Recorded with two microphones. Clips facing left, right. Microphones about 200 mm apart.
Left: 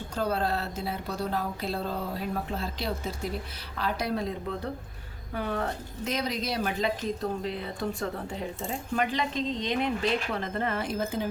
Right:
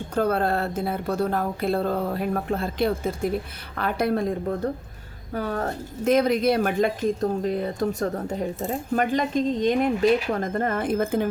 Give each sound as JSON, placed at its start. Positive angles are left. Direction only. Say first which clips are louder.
{"t": 0.1, "sound": "a woman's voice", "louder": "right 6 dB", "side_deg": -55}